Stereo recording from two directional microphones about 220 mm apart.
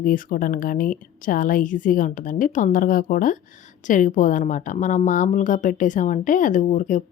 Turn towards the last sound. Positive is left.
turn(degrees=35)  # may be behind; listen again after turning